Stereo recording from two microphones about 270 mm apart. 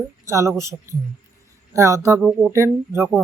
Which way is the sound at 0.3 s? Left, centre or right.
Centre.